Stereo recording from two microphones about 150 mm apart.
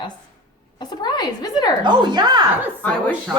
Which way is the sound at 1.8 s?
30° right (ahead or behind).